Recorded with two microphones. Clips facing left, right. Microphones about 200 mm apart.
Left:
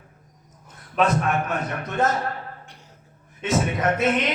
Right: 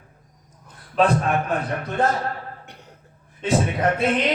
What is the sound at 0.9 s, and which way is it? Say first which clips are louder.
Speech: right 2 dB; 30° right (ahead or behind).